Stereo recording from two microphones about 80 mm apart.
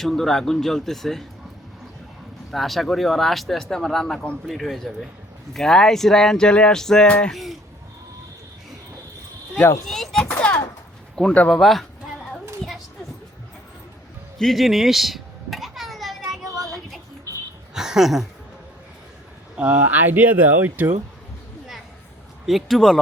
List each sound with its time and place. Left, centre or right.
0.0 s speech: centre
2.5 s speech: centre
9.8 s speech: centre
10.2 s a sound: centre
11.4 s speech: centre
14.3 s a sound: centre
17.7 s a sound: centre
19.5 s speech: right
22.4 s speech: centre